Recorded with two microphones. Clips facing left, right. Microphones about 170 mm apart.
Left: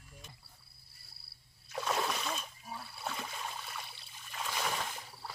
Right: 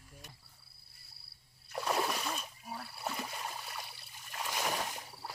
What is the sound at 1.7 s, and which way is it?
Splash, 10° right (ahead or behind).